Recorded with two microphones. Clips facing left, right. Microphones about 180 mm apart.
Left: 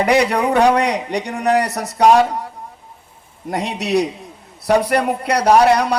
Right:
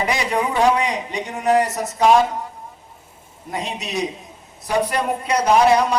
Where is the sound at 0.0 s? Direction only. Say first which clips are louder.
Left 6 dB; 70° left (ahead or behind).